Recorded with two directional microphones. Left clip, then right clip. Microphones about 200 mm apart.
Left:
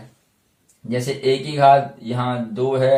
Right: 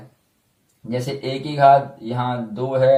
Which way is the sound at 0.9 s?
10° left (ahead or behind).